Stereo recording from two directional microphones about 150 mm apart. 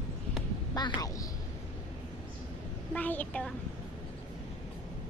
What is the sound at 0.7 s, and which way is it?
Speech, 30° left (ahead or behind).